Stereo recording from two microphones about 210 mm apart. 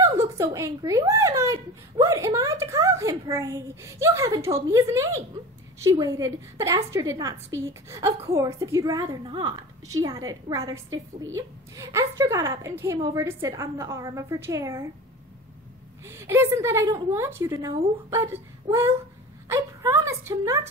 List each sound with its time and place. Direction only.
0.0 s speech: 15° right (ahead or behind)
16.1 s speech: 10° right (ahead or behind)
19.5 s a sound: 15° right (ahead or behind)